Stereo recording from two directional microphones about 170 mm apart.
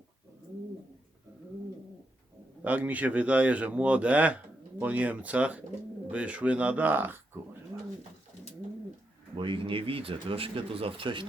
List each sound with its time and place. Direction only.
2.6 s speech: 10° right (ahead or behind)
9.3 s speech: 30° right (ahead or behind)